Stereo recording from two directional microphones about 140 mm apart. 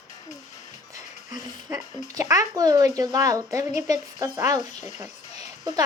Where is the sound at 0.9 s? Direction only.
25° right (ahead or behind).